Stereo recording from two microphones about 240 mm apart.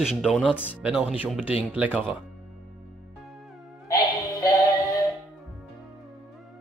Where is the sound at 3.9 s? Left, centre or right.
Centre.